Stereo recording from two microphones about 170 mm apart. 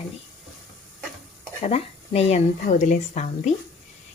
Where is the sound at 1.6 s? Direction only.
40° left (ahead or behind).